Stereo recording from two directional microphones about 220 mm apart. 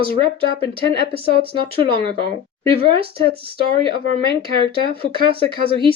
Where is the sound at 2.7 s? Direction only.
25° right (ahead or behind).